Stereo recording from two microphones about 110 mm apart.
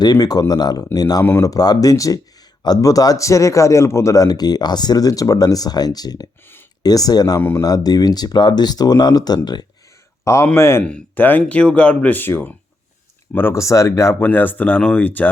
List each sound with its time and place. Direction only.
0.0 s speech: 35° left (ahead or behind)
1.2 s speech: 20° left (ahead or behind)
1.5 s speech: 35° left (ahead or behind)
10.2 s speech: 25° left (ahead or behind)